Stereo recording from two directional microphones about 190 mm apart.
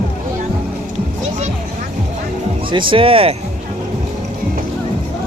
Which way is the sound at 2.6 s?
25° right (ahead or behind).